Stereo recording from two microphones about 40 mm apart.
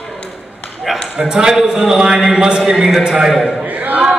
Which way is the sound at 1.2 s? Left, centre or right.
Centre.